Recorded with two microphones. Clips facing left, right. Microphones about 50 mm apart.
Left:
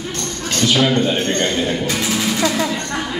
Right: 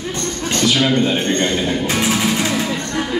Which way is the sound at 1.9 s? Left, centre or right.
Right.